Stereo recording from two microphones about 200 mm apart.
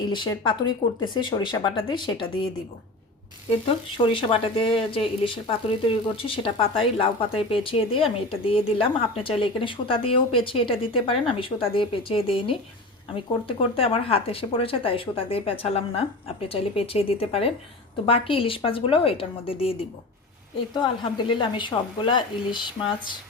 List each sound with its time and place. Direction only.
0.1 s speech: 20° left (ahead or behind)
3.7 s speech: 25° left (ahead or behind)
13.7 s speech: 30° left (ahead or behind)
20.8 s speech: 25° left (ahead or behind)